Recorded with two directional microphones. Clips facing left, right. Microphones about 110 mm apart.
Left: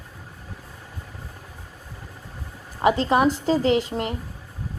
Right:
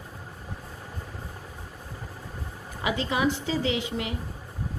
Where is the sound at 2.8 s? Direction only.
45° left (ahead or behind).